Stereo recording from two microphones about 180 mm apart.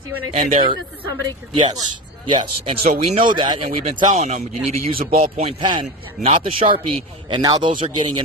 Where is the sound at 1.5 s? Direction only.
25° right (ahead or behind).